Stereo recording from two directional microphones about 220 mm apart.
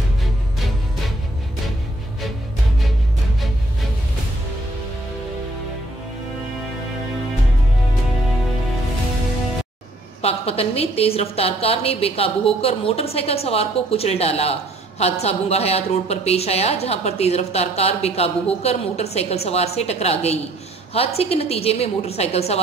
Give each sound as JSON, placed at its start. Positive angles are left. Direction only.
{"t": 10.2, "sound": "a woman's voice", "side_deg": 25}